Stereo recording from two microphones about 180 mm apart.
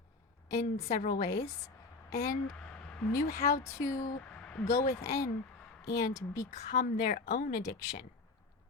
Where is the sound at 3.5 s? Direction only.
20° left (ahead or behind).